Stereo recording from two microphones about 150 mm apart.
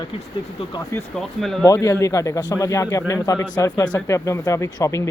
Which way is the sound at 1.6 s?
20° left (ahead or behind).